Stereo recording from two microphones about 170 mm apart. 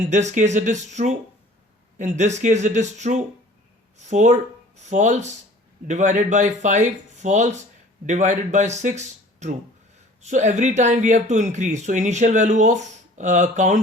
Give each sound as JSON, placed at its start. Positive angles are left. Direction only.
{"t": 0.0, "sound": "speech", "side_deg": -45}